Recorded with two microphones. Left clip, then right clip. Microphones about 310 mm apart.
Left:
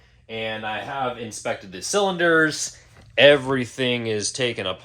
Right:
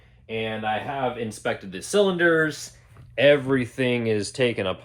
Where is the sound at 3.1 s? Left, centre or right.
Centre.